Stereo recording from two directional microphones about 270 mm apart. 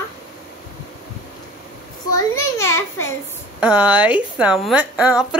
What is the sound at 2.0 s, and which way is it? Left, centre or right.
A child's voice, centre.